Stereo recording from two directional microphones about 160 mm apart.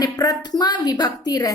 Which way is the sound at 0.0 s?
20° left (ahead or behind).